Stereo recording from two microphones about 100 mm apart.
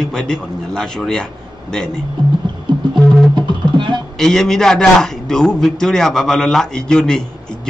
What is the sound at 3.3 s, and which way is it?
Music, 50° right (ahead or behind).